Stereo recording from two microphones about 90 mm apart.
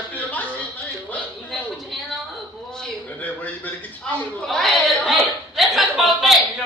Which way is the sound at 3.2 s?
20° left (ahead or behind).